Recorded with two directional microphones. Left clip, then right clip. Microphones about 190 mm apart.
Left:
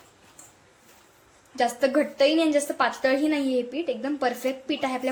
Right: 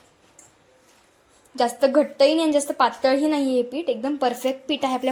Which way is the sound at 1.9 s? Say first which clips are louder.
Right 4 dB; 20° right (ahead or behind).